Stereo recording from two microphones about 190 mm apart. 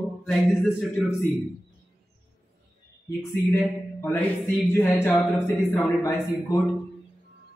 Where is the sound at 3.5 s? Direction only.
10° left (ahead or behind).